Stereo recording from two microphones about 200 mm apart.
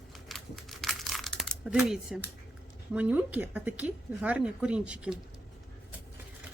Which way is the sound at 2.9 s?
5° right (ahead or behind).